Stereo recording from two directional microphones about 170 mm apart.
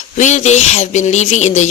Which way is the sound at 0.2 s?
45° left (ahead or behind).